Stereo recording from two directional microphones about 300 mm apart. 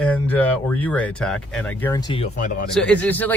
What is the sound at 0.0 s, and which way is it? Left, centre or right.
Speech, centre.